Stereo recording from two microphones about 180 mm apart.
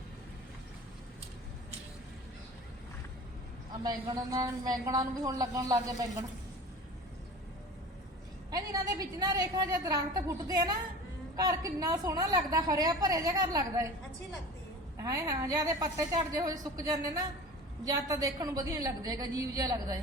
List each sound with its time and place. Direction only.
3.8 s a woman's voice: 20° right (ahead or behind)
8.4 s a woman's voice: 20° right (ahead or behind)
14.9 s a woman's voice: 15° right (ahead or behind)